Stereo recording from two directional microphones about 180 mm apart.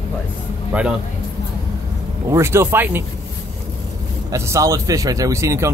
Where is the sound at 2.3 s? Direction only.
15° right (ahead or behind).